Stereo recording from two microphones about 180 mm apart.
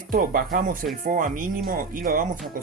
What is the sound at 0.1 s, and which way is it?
Speech, 50° right (ahead or behind).